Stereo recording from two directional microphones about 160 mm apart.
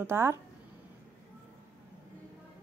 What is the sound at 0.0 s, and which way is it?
Speech, 15° right (ahead or behind).